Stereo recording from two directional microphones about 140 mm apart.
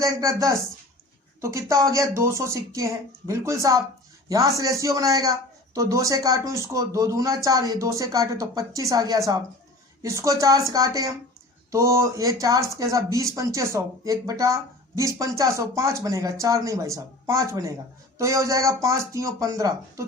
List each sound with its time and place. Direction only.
0.0 s a man's voice: 25° right (ahead or behind)